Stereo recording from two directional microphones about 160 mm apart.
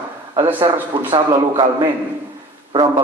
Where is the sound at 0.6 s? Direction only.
30° right (ahead or behind).